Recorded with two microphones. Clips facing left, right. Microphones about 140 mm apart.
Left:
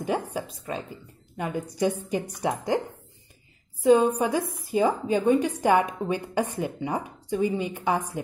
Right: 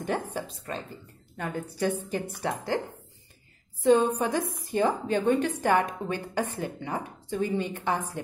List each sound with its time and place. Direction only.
0.0 s a woman's voice: 10° left (ahead or behind)
3.8 s a woman's voice: 10° left (ahead or behind)